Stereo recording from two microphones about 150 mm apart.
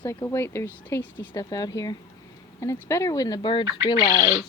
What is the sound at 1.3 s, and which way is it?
Speech, 25° left (ahead or behind).